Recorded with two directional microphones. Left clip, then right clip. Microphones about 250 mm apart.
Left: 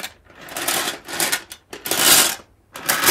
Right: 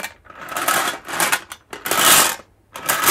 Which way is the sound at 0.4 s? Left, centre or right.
Centre.